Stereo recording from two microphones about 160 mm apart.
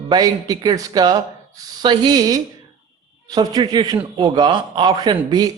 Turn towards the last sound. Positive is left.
turn(degrees=-25)  # may be behind; listen again after turning